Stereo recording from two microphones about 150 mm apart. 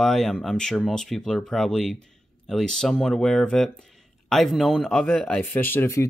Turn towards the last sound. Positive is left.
turn(degrees=15)  # may be behind; listen again after turning